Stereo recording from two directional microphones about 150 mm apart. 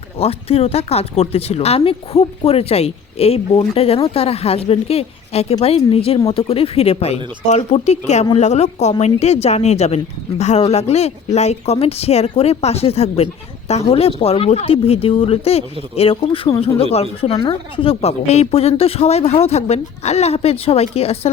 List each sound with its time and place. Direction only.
0.2 s a woman's voice: 40° left (ahead or behind)